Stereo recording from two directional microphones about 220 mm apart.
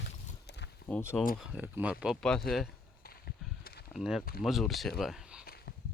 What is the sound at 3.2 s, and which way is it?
Walk, 45° left (ahead or behind).